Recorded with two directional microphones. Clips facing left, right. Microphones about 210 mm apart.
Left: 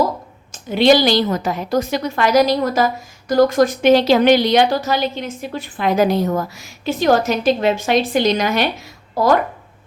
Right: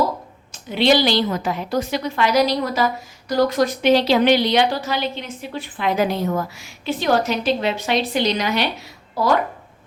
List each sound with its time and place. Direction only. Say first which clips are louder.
0.5 s a woman's voice: left 4 dB; 45° left (ahead or behind)